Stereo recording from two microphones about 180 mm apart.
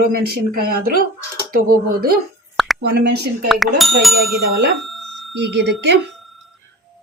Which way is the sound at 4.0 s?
Centre (ahead or behind).